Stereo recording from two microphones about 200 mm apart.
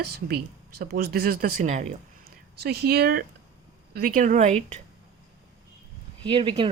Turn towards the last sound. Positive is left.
turn(degrees=-25)  # may be behind; listen again after turning